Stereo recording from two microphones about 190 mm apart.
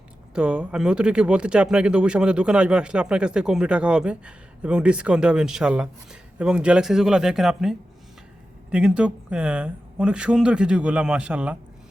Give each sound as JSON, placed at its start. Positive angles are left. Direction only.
{"t": 0.3, "sound": "speech", "side_deg": -5}